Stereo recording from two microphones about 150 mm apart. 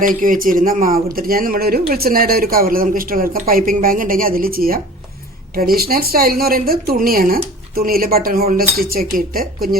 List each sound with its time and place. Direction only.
0.0 s speech: 65° right (ahead or behind)